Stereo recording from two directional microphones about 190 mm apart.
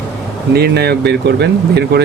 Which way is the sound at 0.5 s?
55° right (ahead or behind).